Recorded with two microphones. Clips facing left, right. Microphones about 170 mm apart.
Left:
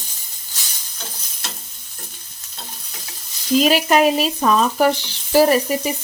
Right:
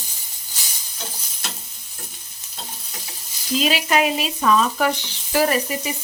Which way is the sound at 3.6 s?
45° left (ahead or behind).